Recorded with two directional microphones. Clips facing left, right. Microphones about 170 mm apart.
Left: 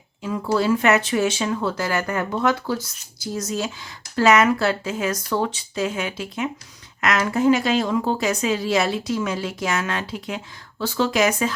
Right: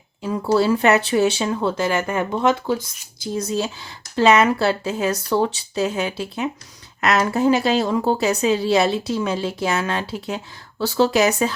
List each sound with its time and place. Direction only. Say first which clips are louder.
0.2 s speech: right 3 dB; 35° right (ahead or behind)